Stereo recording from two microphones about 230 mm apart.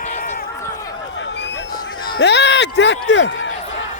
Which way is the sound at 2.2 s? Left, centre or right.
Left.